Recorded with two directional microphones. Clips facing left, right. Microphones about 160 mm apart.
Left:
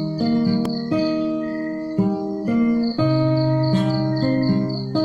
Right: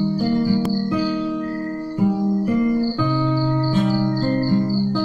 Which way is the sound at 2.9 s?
20° left (ahead or behind).